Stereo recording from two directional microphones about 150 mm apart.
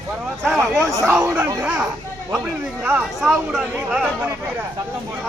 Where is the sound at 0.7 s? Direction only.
Centre (ahead or behind).